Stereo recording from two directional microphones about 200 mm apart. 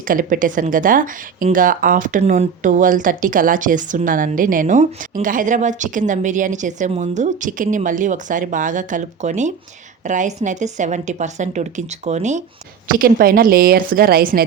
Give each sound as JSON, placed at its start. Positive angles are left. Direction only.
{"t": 0.0, "sound": "speech", "side_deg": -45}
{"t": 12.9, "sound": "a woman's voice", "side_deg": -45}